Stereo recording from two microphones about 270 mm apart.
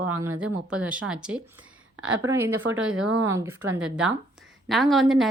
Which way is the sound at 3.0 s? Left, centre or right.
Right.